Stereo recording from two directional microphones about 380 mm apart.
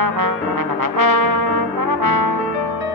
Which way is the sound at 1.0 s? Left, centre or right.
Right.